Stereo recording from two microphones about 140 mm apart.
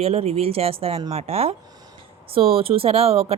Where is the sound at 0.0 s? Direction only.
45° right (ahead or behind).